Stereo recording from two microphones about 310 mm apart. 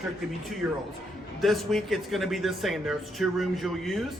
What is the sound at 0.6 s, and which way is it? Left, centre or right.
Speech, centre.